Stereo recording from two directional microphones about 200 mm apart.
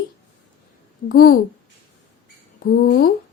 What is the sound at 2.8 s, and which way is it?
Speech, 45° left (ahead or behind).